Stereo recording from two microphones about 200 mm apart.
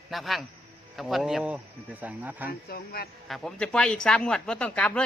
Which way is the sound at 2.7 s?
50° left (ahead or behind).